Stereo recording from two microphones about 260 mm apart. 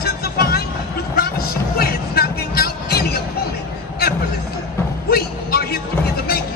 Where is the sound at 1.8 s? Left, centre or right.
Left.